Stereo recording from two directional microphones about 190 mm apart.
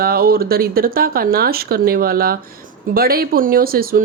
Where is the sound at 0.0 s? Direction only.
50° right (ahead or behind).